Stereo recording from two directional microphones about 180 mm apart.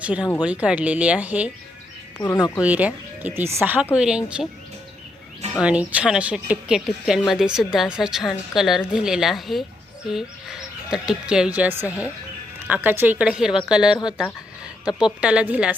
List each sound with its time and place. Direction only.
0.2 s speech: 20° left (ahead or behind)
0.4 s a woman's voice: 5° right (ahead or behind)
2.1 s speech: 20° left (ahead or behind)
2.6 s a woman's voice: 10° right (ahead or behind)
5.5 s a woman's voice: 5° right (ahead or behind)